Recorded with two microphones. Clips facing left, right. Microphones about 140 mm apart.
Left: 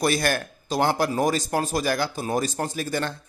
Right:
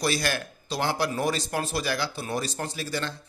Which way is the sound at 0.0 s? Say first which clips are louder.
Left 4 dB; 50° left (ahead or behind).